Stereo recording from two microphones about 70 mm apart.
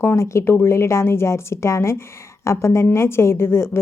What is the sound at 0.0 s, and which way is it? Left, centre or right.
A woman's voice, left.